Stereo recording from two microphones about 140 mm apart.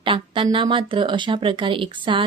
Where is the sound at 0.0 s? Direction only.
40° right (ahead or behind).